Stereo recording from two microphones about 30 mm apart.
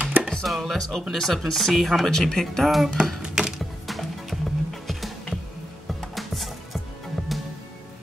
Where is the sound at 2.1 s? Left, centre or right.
Centre.